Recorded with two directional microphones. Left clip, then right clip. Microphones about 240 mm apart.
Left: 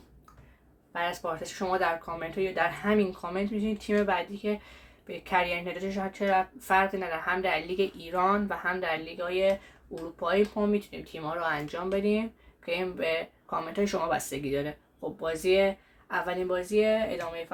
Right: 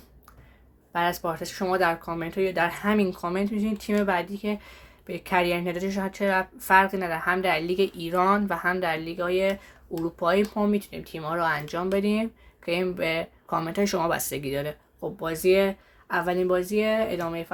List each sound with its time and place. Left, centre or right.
0.9 s a woman's voice: right